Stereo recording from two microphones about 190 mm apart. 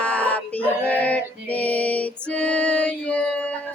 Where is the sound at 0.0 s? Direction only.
5° left (ahead or behind).